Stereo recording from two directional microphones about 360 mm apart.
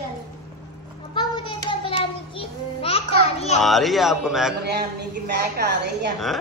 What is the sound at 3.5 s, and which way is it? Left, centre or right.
Speech, centre.